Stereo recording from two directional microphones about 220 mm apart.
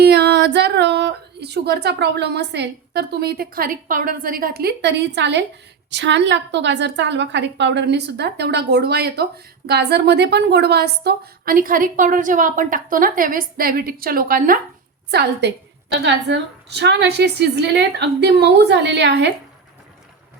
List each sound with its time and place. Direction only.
0.0 s a woman's voice: 50° right (ahead or behind)